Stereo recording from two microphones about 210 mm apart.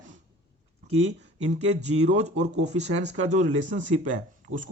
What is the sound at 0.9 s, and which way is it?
Speech, 30° right (ahead or behind).